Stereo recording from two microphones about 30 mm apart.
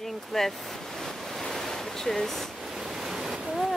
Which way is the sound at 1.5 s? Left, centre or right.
Centre.